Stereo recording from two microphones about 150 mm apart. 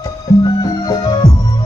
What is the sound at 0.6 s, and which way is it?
Music, 25° left (ahead or behind).